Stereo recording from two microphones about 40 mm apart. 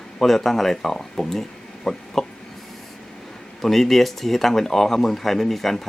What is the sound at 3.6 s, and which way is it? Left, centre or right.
Speech, centre.